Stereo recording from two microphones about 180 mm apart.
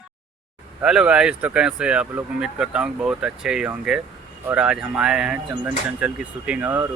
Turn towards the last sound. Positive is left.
turn(degrees=-10)  # may be behind; listen again after turning